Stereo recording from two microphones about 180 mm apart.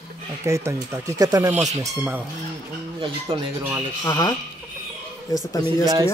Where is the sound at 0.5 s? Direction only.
15° right (ahead or behind).